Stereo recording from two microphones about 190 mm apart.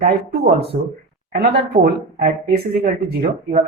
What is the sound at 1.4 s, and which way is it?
Speech, 60° right (ahead or behind).